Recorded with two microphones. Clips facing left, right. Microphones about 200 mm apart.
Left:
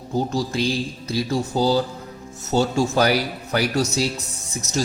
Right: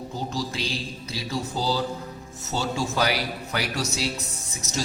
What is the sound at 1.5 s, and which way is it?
Speech, 50° left (ahead or behind).